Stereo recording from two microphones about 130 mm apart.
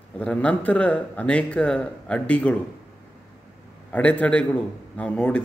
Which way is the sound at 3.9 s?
10° left (ahead or behind).